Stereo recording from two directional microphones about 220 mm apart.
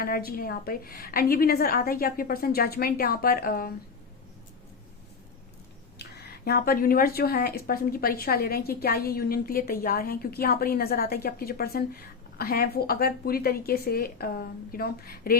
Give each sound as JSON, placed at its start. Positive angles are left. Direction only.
{"t": 0.0, "sound": "speech", "side_deg": 45}
{"t": 6.0, "sound": "speech", "side_deg": 45}